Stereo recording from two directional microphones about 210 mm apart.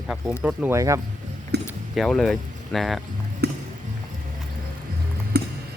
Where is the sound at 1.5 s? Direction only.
50° right (ahead or behind).